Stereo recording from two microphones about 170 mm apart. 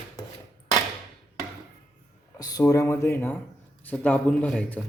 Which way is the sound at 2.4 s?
20° left (ahead or behind).